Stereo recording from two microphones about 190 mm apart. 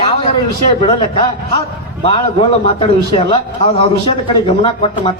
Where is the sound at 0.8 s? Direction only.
30° left (ahead or behind).